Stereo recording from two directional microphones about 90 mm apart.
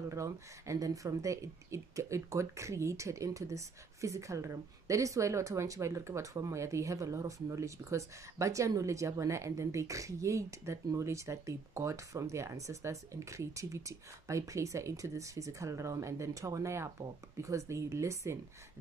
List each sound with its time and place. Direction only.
0.1 s speech: 35° right (ahead or behind)